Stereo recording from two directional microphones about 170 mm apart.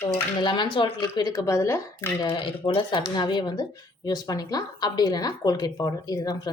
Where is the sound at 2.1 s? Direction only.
30° left (ahead or behind).